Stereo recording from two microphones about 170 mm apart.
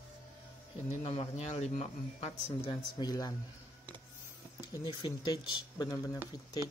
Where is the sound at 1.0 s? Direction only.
35° left (ahead or behind).